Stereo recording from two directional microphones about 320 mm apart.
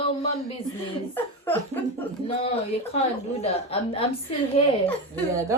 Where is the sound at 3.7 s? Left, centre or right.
Centre.